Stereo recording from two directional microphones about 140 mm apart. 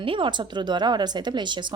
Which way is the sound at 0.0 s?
40° right (ahead or behind).